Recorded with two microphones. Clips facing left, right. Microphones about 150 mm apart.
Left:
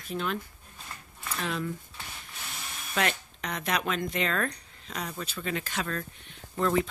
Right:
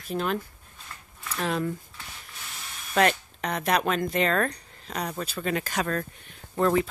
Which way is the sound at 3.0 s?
40° right (ahead or behind).